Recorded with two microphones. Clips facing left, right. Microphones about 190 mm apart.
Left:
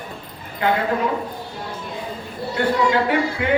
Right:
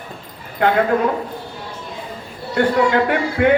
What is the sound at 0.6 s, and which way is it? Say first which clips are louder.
Speech: right 3 dB; 55° right (ahead or behind).